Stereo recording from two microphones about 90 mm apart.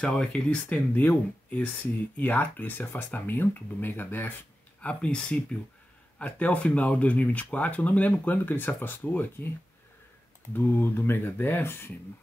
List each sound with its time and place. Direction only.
0.0 s speech: 10° left (ahead or behind)
4.8 s speech: 10° left (ahead or behind)
10.5 s speech: 20° left (ahead or behind)